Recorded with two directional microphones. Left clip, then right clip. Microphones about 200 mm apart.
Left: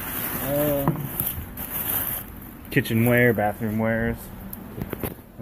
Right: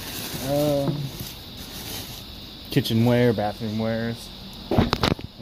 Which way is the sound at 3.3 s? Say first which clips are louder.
Left 2 dB; 5° right (ahead or behind).